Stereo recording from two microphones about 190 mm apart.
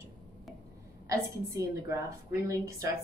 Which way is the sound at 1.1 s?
15° right (ahead or behind).